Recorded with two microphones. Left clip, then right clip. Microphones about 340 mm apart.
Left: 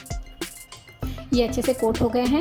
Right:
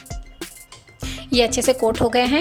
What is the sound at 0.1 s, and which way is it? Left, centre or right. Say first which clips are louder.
Music: left 1 dB; centre.